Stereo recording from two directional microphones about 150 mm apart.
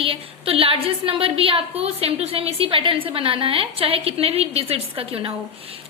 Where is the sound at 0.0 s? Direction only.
40° right (ahead or behind).